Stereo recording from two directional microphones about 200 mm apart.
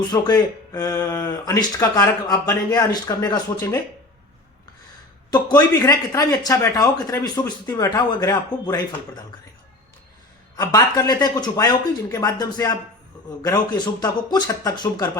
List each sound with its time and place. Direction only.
0.1 s speech: 15° left (ahead or behind)
5.5 s speech: 15° left (ahead or behind)
10.6 s speech: 15° left (ahead or behind)